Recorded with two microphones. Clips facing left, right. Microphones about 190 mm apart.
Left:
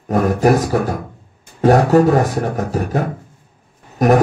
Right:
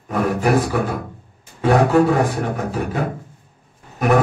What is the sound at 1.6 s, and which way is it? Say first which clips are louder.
Speech: left 3 dB; 40° left (ahead or behind).